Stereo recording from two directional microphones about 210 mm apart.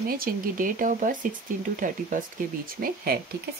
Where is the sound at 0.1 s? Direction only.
40° right (ahead or behind).